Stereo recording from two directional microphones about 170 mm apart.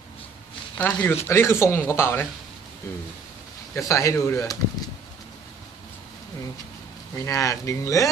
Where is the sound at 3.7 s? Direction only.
20° left (ahead or behind).